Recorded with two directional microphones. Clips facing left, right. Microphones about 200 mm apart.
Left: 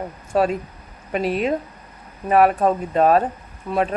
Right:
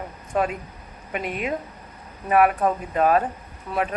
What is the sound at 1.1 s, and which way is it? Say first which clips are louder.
Speech: left 6 dB; 30° left (ahead or behind).